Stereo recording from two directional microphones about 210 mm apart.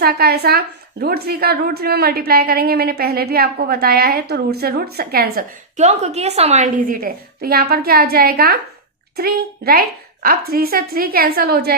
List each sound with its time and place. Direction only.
0.0 s a woman's voice: 45° right (ahead or behind)